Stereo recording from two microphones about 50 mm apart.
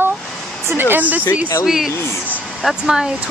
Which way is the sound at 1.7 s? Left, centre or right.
Centre.